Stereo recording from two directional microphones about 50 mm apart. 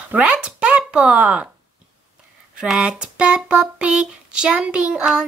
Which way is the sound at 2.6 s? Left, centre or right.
Centre.